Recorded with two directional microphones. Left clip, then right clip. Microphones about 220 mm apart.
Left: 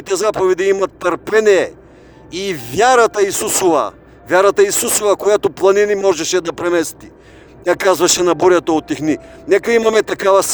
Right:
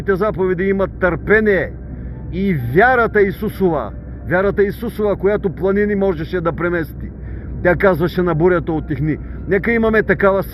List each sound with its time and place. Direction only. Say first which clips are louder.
0.0 s speech: left 2 dB; 45° left (ahead or behind)